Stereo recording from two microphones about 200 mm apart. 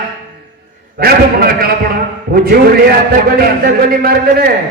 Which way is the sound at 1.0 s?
50° right (ahead or behind).